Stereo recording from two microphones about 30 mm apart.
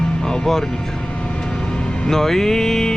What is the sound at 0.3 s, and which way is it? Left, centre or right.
Music, centre.